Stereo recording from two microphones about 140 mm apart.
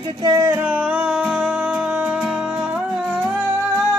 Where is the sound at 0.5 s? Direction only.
10° right (ahead or behind).